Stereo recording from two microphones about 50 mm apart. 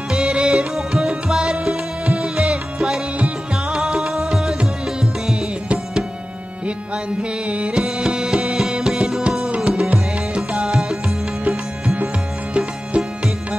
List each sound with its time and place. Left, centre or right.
0.1 s music: centre
7.2 s music: right
7.8 s music: centre
9.7 s music: centre
12.5 s music: right